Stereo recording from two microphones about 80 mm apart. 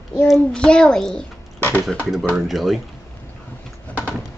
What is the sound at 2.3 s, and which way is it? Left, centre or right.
Speech, centre.